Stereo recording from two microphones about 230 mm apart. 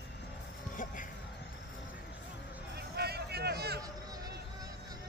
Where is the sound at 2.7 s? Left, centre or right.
Right.